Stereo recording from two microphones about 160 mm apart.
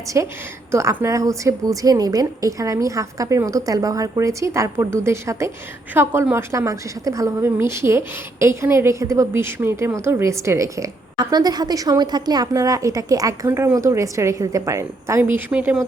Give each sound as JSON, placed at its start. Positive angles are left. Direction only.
{"t": 0.1, "sound": "a woman's voice", "side_deg": -15}